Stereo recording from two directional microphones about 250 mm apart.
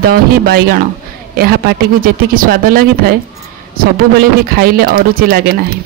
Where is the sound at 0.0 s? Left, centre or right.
Right.